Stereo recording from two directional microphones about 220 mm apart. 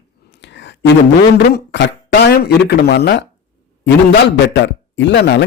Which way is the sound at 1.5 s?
50° left (ahead or behind).